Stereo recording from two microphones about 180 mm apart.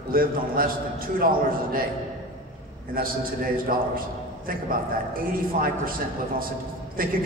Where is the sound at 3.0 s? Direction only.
55° right (ahead or behind).